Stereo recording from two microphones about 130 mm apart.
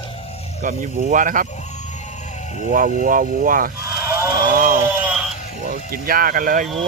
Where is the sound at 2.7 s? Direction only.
90° right.